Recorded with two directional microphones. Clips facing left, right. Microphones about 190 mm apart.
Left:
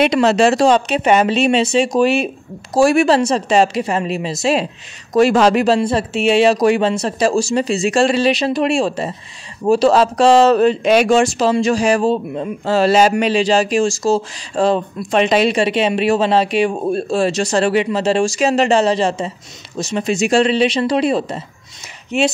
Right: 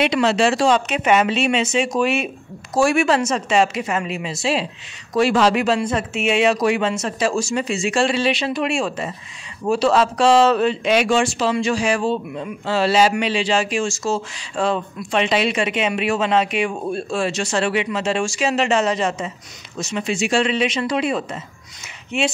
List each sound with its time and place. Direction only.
0.0 s speech: 40° left (ahead or behind)